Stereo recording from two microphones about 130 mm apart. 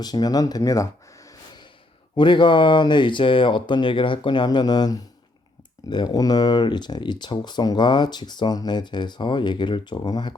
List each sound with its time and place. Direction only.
0.0 s speech: 30° left (ahead or behind)
2.1 s speech: 40° left (ahead or behind)